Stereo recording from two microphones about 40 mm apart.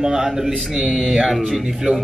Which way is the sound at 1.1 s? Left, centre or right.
Centre.